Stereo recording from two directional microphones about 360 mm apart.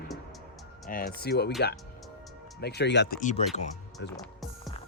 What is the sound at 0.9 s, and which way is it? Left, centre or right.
Speech, left.